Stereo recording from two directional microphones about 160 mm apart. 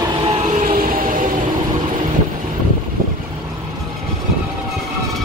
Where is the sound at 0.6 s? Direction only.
65° right (ahead or behind).